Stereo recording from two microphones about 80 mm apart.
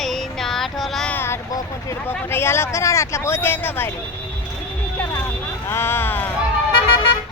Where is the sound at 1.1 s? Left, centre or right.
Left.